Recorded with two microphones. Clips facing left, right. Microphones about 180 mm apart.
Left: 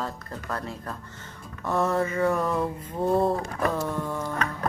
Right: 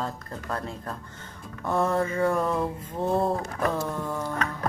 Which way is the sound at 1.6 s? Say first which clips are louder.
Even; centre (ahead or behind).